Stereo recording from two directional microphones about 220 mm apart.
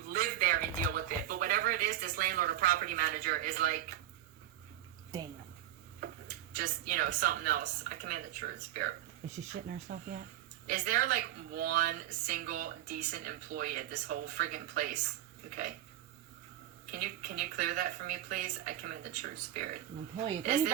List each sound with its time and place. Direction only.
0.1 s a sound: 40° right (ahead or behind)
5.1 s a woman's voice: 15° right (ahead or behind)
6.6 s speech: 40° right (ahead or behind)
16.9 s speech: 40° right (ahead or behind)